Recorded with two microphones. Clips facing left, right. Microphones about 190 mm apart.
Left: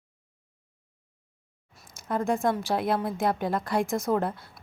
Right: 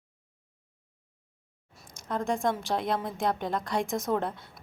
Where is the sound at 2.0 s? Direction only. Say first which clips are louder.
Left 3 dB; 5° left (ahead or behind).